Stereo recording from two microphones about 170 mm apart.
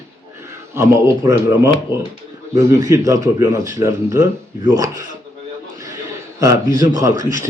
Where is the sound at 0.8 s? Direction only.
15° right (ahead or behind).